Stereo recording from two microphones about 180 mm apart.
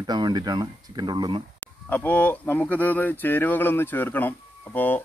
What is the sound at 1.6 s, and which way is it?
Speech, 10° left (ahead or behind).